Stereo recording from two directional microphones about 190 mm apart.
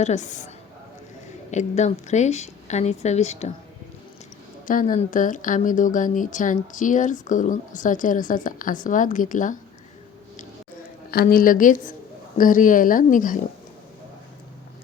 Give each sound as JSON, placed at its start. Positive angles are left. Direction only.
{"t": 0.0, "sound": "a woman's voice", "side_deg": 35}
{"t": 4.6, "sound": "speech", "side_deg": 45}
{"t": 11.1, "sound": "speech", "side_deg": 50}